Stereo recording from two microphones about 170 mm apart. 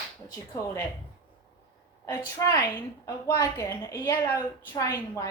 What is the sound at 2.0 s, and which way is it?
A woman's voice, 20° left (ahead or behind).